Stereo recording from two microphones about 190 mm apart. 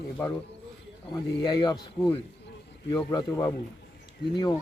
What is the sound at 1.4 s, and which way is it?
A man's voice, 20° left (ahead or behind).